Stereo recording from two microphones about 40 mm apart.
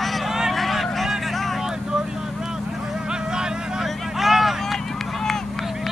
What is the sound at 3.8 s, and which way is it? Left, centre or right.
Vehicle, centre.